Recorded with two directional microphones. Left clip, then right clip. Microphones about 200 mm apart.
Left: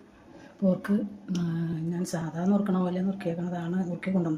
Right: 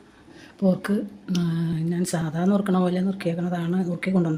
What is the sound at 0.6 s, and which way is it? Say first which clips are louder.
Speech: right 4 dB; 25° right (ahead or behind).